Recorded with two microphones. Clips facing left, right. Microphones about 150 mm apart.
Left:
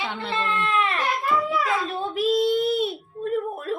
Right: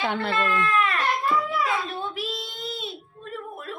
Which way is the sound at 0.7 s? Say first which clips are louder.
Even; 25° left (ahead or behind).